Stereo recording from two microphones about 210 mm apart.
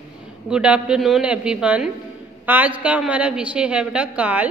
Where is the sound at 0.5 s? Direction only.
5° right (ahead or behind).